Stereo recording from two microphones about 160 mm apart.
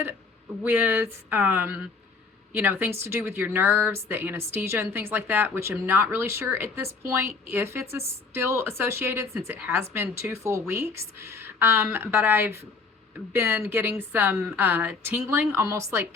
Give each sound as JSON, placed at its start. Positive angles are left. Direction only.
{"t": 0.6, "sound": "speech", "side_deg": -15}